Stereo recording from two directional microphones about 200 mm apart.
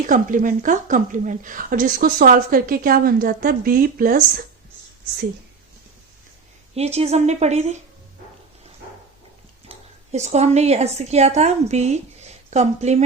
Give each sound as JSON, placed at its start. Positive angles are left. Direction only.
{"t": 0.1, "sound": "a woman's voice", "side_deg": -40}
{"t": 6.7, "sound": "a woman's voice", "side_deg": -30}
{"t": 9.6, "sound": "a woman's voice", "side_deg": -35}